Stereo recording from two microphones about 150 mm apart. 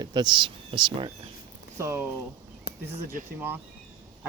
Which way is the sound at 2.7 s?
90° left.